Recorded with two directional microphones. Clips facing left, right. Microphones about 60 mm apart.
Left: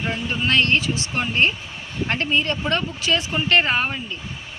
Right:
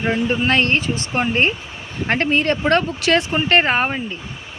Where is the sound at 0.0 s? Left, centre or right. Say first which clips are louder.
Right 6 dB; right.